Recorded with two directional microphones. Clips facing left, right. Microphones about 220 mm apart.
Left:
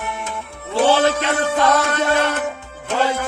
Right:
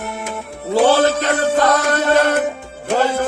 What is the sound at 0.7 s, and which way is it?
Music, 40° right (ahead or behind).